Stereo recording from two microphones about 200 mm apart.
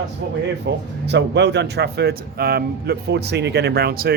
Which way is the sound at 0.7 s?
60° right (ahead or behind).